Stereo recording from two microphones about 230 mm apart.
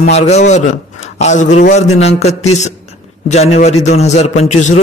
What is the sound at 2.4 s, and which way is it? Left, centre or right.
A man's voice, left.